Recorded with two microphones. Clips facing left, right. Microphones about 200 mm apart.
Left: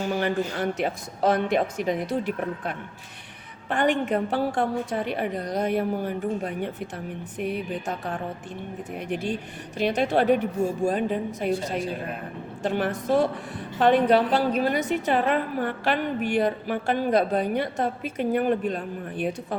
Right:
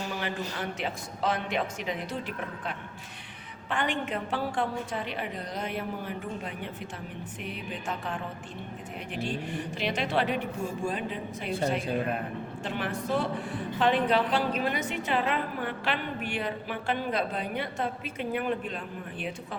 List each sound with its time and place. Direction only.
0.1 s a sound: 50° left (ahead or behind)
0.5 s a woman's voice: 40° left (ahead or behind)
7.9 s a woman's voice: 40° left (ahead or behind)
9.7 s a woman's voice: 45° left (ahead or behind)
12.6 s a woman's voice: 40° left (ahead or behind)